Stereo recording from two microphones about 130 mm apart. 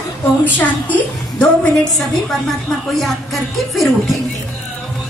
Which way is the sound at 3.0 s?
Centre (ahead or behind).